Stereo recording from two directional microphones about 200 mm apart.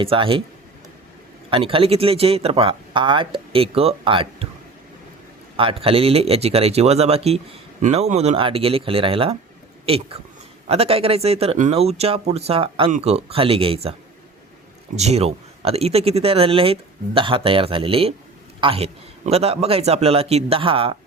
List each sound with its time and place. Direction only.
0.0 s speech: 25° right (ahead or behind)
1.5 s speech: 25° right (ahead or behind)
5.5 s speech: 25° right (ahead or behind)
14.9 s speech: 30° right (ahead or behind)